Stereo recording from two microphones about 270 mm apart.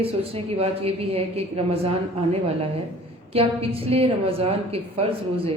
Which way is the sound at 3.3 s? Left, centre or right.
Right.